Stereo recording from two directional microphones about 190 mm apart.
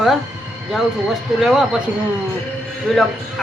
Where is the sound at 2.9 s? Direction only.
Centre (ahead or behind).